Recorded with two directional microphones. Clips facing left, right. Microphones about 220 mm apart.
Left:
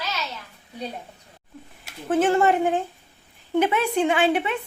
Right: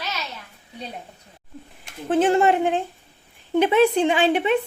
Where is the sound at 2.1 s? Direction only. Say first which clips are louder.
Right 1 dB; 20° right (ahead or behind).